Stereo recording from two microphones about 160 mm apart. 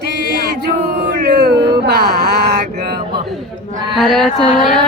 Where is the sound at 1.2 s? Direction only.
90° right.